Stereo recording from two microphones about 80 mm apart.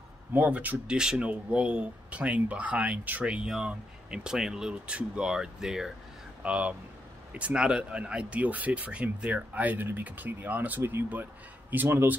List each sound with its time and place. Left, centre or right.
0.3 s speech: centre